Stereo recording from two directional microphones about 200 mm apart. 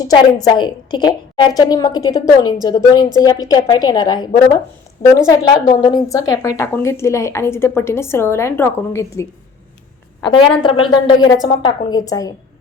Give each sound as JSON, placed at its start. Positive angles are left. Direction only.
{"t": 0.4, "sound": "a woman's voice", "side_deg": 20}
{"t": 10.2, "sound": "a woman's voice", "side_deg": 25}